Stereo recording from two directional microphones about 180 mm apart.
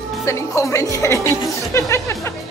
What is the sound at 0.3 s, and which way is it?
Speech, 15° left (ahead or behind).